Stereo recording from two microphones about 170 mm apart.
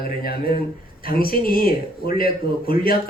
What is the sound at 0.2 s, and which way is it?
Speech, 60° left (ahead or behind).